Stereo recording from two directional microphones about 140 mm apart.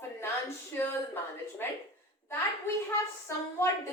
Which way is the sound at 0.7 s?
20° left (ahead or behind).